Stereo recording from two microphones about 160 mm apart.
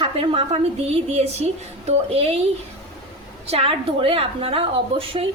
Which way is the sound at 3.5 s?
35° right (ahead or behind).